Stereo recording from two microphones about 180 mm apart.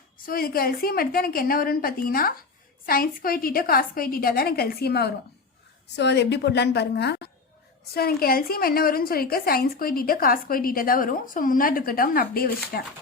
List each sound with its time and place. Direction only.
0.3 s a woman's voice: 55° left (ahead or behind)
7.9 s a woman's voice: 60° left (ahead or behind)